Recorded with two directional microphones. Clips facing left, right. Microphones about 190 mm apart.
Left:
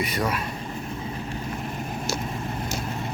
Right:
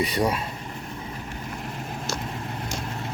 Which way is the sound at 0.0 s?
30° right (ahead or behind).